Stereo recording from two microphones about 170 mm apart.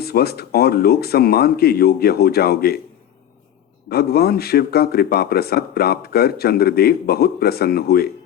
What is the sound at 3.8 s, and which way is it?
A man's voice, 65° left (ahead or behind).